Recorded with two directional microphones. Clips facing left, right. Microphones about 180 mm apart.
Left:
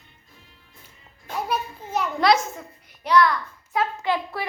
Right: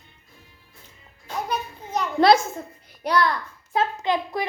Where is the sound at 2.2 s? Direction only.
30° right (ahead or behind).